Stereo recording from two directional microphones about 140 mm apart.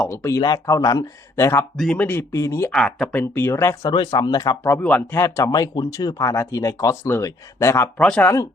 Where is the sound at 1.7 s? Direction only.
5° left (ahead or behind).